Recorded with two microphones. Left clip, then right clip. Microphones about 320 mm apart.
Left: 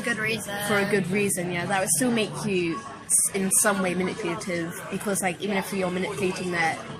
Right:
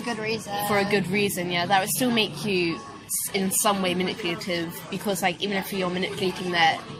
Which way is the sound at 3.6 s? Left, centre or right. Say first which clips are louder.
Right 1 dB; centre.